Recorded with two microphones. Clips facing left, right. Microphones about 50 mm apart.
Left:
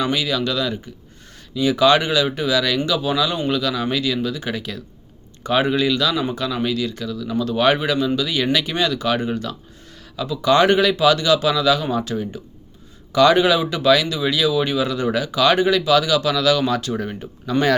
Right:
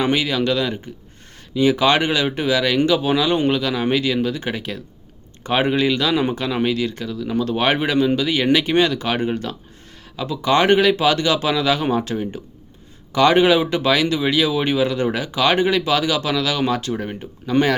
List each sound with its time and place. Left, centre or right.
0.0 s speech: right